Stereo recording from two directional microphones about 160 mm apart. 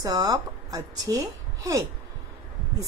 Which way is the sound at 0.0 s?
20° right (ahead or behind).